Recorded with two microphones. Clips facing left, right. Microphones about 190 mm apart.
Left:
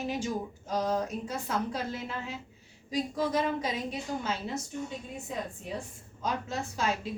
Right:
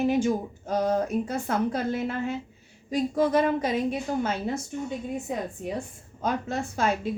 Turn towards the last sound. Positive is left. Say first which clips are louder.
# right 5 dB
turn(degrees=-55)  # may be behind; listen again after turning